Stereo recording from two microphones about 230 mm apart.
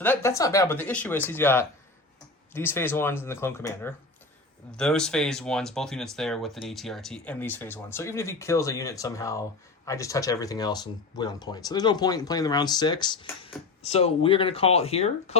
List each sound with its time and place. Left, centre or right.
0.0 s speech: centre; by 15.4 s left